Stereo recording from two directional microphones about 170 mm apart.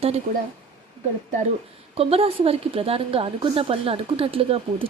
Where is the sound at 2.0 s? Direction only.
35° right (ahead or behind).